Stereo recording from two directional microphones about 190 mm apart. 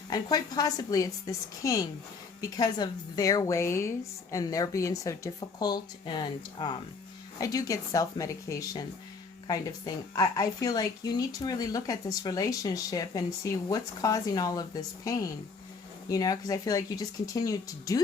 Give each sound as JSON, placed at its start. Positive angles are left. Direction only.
{"t": 0.1, "sound": "speech", "side_deg": 20}